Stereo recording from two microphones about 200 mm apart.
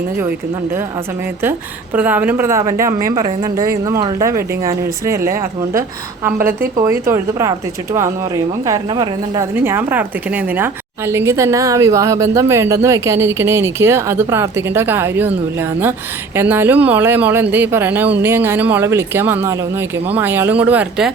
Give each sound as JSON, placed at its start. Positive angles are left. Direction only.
{"t": 1.4, "sound": "a woman's voice", "side_deg": -10}
{"t": 6.4, "sound": "a woman's voice", "side_deg": -45}
{"t": 6.7, "sound": "a woman's voice", "side_deg": -15}
{"t": 8.6, "sound": "a woman's voice", "side_deg": -20}